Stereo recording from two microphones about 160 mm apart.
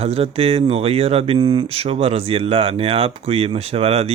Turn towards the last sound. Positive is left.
turn(degrees=-40)  # may be behind; listen again after turning